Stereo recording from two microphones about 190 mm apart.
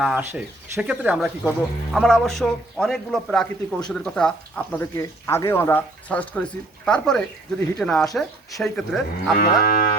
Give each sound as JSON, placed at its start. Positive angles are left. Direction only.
{"t": 0.0, "sound": "speech", "side_deg": -5}
{"t": 9.4, "sound": "cattle", "side_deg": 55}